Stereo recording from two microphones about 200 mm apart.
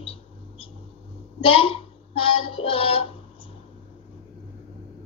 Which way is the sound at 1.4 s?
30° left (ahead or behind).